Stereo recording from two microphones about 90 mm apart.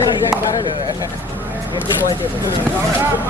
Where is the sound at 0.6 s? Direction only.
45° left (ahead or behind).